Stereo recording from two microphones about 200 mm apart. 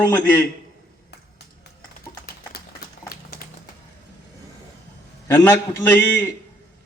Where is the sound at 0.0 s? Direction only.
10° left (ahead or behind).